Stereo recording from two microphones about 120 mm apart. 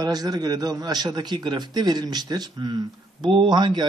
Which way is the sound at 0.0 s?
35° right (ahead or behind).